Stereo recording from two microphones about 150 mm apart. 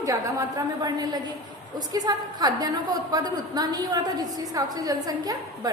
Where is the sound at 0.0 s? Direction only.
20° right (ahead or behind).